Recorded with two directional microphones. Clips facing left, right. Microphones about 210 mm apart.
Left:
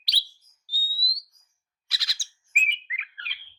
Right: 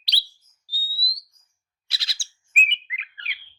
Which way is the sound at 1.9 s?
25° right (ahead or behind).